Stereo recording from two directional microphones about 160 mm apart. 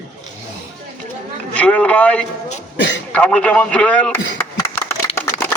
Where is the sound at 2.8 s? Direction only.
90° left.